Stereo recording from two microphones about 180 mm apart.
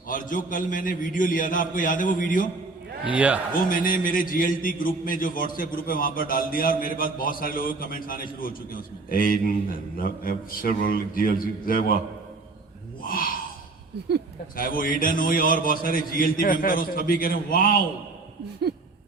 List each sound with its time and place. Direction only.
0.1 s a man's voice: 50° left (ahead or behind)
3.1 s a man's voice: 10° right (ahead or behind)
3.6 s a man's voice: 50° left (ahead or behind)
13.0 s a sound: 50° left (ahead or behind)
14.5 s a man's voice: 50° left (ahead or behind)